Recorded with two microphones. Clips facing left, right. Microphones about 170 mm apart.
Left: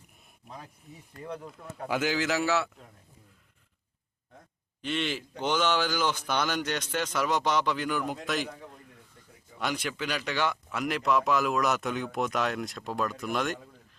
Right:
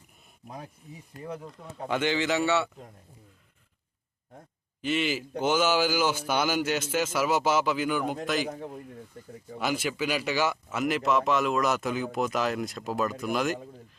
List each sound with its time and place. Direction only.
1.2 s speech: 5° right (ahead or behind)
1.9 s speech: 5° left (ahead or behind)
4.8 s speech: 5° right (ahead or behind)
8.4 s speech: 40° right (ahead or behind)
9.6 s speech: 5° right (ahead or behind)